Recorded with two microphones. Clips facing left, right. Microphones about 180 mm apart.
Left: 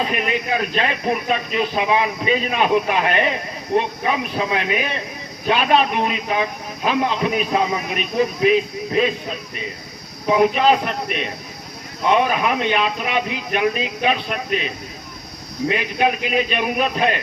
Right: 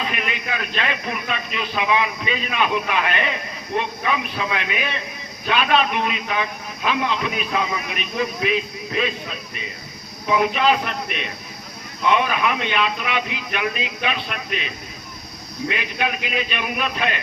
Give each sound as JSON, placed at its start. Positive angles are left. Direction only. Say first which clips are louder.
{"t": 0.0, "sound": "a man's voice", "louder": "left 5 dB", "side_deg": 40}
{"t": 10.2, "sound": "a man's voice", "louder": "left 3 dB", "side_deg": 40}
{"t": 12.0, "sound": "a man's voice", "louder": "left 2 dB", "side_deg": 40}
{"t": 15.7, "sound": "a man's voice", "louder": "left 6 dB", "side_deg": 40}